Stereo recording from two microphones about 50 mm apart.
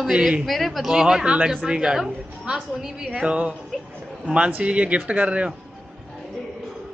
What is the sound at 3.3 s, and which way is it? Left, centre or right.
A man's voice, right.